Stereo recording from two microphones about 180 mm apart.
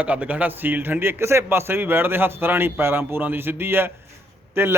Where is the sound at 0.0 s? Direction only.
10° right (ahead or behind).